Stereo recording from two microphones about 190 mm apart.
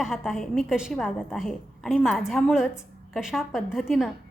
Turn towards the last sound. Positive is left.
turn(degrees=0)  # may be behind; listen again after turning